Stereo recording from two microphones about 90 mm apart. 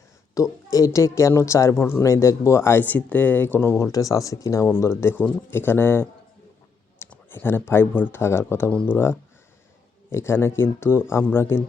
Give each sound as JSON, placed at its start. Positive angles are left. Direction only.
{"t": 0.3, "sound": "speech", "side_deg": 40}
{"t": 3.9, "sound": "speech", "side_deg": 40}
{"t": 7.3, "sound": "speech", "side_deg": 25}
{"t": 8.7, "sound": "speech", "side_deg": 15}
{"t": 10.1, "sound": "speech", "side_deg": 30}